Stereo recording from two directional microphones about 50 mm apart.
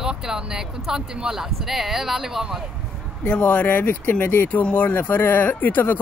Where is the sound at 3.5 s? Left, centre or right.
Left.